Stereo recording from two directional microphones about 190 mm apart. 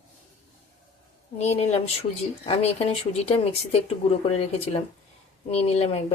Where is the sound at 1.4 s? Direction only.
35° left (ahead or behind).